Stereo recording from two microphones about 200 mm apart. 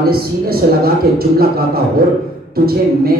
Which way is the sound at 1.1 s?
50° right (ahead or behind).